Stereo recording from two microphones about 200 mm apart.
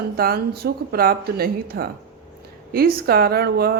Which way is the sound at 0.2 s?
50° right (ahead or behind).